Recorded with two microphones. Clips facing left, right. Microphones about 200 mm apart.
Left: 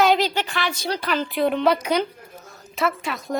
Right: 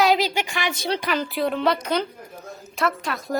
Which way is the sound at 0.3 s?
10° right (ahead or behind).